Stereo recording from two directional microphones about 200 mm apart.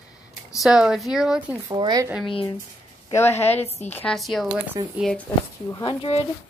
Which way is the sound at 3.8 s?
5° left (ahead or behind).